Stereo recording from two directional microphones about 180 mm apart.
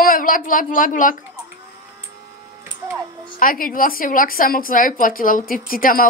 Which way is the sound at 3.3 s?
50° left (ahead or behind).